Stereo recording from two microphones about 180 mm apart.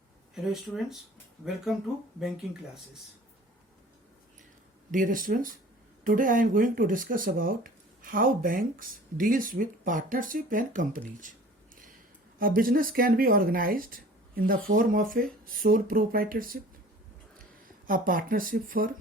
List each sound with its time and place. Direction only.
0.5 s speech: centre (ahead or behind)
2.2 s speech: centre (ahead or behind)
4.9 s speech: 50° right (ahead or behind)
12.4 s speech: 50° right (ahead or behind)
17.8 s speech: 50° right (ahead or behind)